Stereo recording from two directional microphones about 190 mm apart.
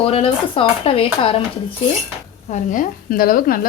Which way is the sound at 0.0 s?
30° left (ahead or behind).